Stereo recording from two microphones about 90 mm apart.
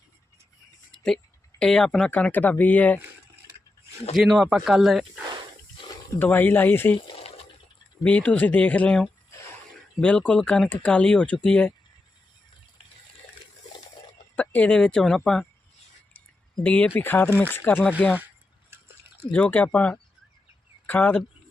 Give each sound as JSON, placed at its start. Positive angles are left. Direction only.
{"t": 0.9, "sound": "speech", "side_deg": 5}
{"t": 4.1, "sound": "speech", "side_deg": -5}
{"t": 6.1, "sound": "speech", "side_deg": 20}
{"t": 8.0, "sound": "speech", "side_deg": 15}
{"t": 14.3, "sound": "speech", "side_deg": 15}
{"t": 16.6, "sound": "speech", "side_deg": 15}
{"t": 19.3, "sound": "speech", "side_deg": 15}